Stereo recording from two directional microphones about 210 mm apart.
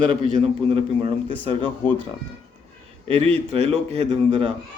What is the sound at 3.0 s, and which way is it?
A man's voice, 30° right (ahead or behind).